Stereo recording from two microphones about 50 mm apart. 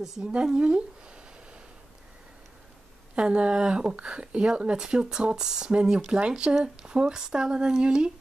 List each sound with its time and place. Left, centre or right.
0.2 s speech: centre
3.2 s speech: right